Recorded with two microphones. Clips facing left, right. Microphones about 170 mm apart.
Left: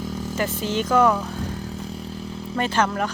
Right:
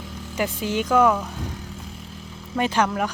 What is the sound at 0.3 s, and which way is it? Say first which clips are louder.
Speech: right 1 dB; 10° right (ahead or behind).